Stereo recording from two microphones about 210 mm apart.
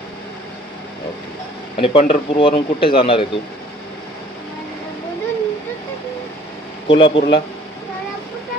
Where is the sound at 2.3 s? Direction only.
25° left (ahead or behind).